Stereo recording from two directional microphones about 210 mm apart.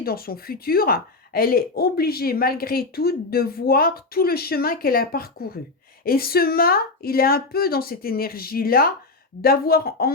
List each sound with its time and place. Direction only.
0.0 s speech: 45° left (ahead or behind)